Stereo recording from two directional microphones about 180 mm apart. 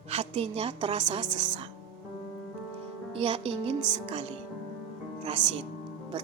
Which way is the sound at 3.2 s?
30° right (ahead or behind).